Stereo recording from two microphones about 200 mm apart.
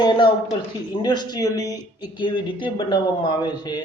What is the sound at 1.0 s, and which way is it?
Speech, 20° left (ahead or behind).